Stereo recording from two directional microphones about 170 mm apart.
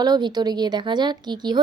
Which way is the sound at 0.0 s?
25° right (ahead or behind).